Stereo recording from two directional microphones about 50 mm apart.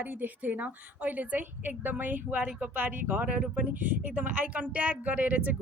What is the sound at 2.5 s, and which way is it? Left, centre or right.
Speech, right.